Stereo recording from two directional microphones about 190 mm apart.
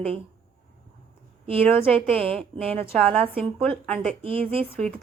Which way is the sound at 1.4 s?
30° right (ahead or behind).